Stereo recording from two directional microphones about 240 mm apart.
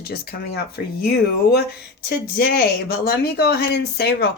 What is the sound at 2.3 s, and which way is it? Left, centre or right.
Speech, left.